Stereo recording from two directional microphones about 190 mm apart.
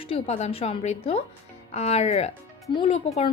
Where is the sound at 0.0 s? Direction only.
30° left (ahead or behind).